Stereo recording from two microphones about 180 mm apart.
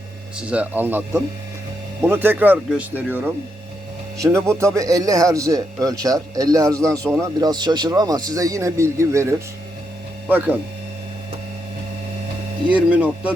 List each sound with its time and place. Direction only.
0.3 s a man's voice: 5° right (ahead or behind)
12.9 s speech: 5° right (ahead or behind)